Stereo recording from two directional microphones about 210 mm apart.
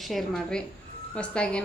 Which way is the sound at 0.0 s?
Centre (ahead or behind).